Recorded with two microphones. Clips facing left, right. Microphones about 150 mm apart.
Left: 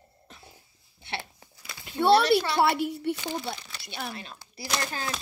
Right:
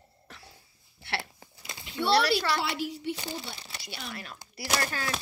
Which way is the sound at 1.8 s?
55° left (ahead or behind).